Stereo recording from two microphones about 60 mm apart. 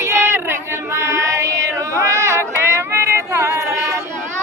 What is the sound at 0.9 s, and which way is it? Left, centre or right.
Female singing, right.